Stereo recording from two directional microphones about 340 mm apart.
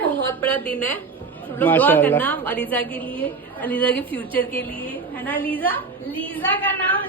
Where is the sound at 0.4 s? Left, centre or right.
Centre.